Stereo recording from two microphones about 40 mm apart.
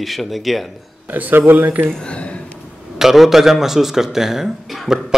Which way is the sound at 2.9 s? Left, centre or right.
Centre.